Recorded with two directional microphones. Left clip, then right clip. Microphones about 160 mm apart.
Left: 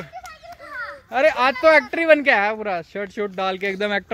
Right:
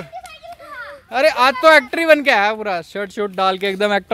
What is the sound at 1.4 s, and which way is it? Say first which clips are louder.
Speech: right 6 dB; 25° right (ahead or behind).